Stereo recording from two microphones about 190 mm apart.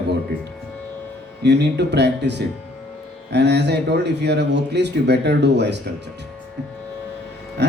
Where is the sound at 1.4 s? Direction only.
65° right (ahead or behind).